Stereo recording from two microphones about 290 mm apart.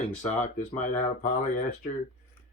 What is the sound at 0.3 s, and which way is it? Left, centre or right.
Speech, left.